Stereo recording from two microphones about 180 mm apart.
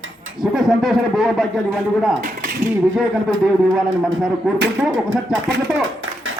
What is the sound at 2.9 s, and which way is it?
Speech, centre (ahead or behind).